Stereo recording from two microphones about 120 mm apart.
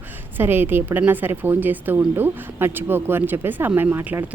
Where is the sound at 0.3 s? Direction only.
15° right (ahead or behind).